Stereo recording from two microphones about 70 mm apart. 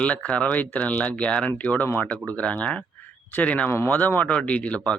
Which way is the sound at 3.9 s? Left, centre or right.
Left.